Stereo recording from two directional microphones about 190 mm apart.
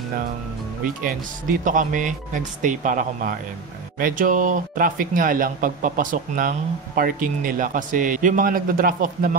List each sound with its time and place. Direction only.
0.8 s speech: 45° right (ahead or behind)